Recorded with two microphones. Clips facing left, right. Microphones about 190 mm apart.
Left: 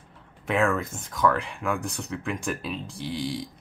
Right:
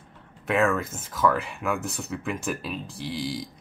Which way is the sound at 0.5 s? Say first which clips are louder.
Right 1 dB; centre (ahead or behind).